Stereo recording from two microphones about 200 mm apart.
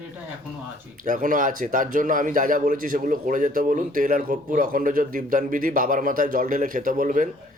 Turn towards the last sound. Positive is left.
turn(degrees=-40)  # may be behind; listen again after turning